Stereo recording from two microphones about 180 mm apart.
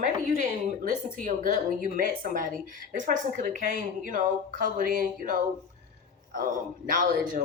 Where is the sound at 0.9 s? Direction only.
50° right (ahead or behind).